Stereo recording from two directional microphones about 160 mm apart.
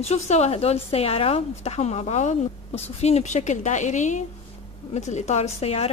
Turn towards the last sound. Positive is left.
turn(degrees=40)  # may be behind; listen again after turning